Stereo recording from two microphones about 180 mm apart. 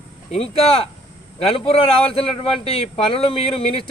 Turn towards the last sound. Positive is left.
turn(degrees=30)  # may be behind; listen again after turning